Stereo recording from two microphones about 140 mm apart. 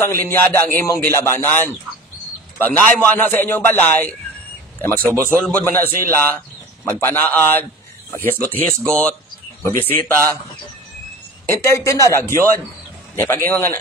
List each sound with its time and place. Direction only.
0.0 s a man's voice: 15° left (ahead or behind)
5.0 s speech: 15° right (ahead or behind)
5.4 s a man's voice: 10° left (ahead or behind)
9.6 s a man's voice: 15° left (ahead or behind)
11.4 s a man's voice: 20° left (ahead or behind)